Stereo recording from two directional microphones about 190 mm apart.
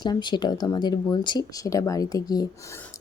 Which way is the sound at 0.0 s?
25° left (ahead or behind).